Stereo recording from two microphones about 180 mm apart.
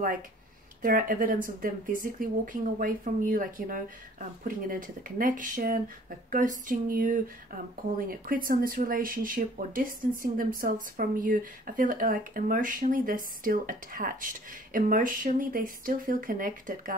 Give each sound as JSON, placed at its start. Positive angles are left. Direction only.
{"t": 0.8, "sound": "speech", "side_deg": -50}